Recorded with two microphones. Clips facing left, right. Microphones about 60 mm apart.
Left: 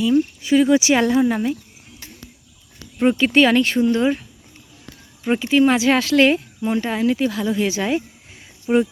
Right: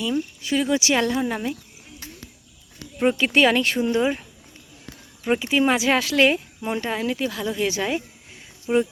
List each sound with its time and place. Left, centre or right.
0.0 s speech: centre
3.0 s speech: centre
6.6 s speech: centre
6.8 s speech: centre
8.7 s speech: centre